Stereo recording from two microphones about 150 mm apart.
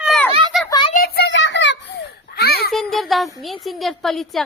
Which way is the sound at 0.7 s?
30° left (ahead or behind).